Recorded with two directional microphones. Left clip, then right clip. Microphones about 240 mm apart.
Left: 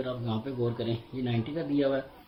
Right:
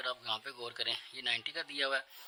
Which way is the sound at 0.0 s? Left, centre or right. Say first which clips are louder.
Left 3 dB; right.